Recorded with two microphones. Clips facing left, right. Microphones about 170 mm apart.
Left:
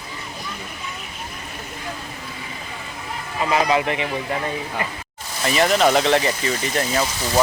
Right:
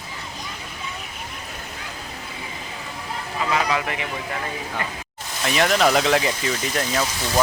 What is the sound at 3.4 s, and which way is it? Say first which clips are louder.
Speech: left 5 dB; 20° left (ahead or behind).